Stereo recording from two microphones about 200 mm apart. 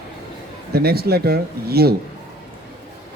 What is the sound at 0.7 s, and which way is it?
Speech, 50° right (ahead or behind).